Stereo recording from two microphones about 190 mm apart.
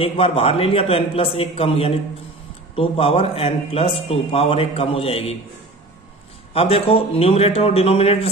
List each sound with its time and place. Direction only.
0.0 s a man's voice: 30° left (ahead or behind)
6.5 s a man's voice: 30° left (ahead or behind)